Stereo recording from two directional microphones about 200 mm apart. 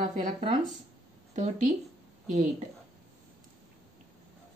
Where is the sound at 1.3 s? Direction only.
40° right (ahead or behind).